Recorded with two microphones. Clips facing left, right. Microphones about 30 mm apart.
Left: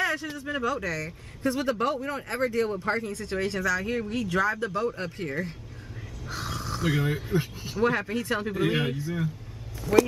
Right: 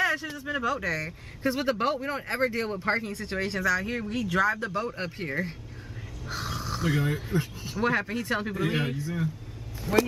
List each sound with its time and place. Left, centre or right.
0.0 s speech: centre
9.9 s speech: right